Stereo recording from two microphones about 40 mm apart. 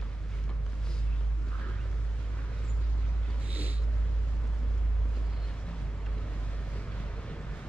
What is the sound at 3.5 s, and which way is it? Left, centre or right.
Vehicle, right.